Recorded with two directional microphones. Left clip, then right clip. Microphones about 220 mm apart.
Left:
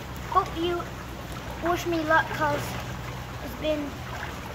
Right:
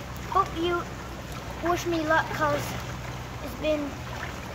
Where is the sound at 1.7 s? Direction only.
Centre (ahead or behind).